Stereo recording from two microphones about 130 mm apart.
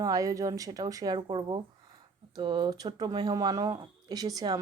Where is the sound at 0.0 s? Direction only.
25° right (ahead or behind).